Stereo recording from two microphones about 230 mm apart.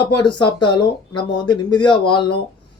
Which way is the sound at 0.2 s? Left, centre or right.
Centre.